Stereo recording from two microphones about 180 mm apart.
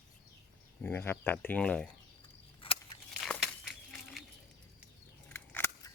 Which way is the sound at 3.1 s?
Centre (ahead or behind).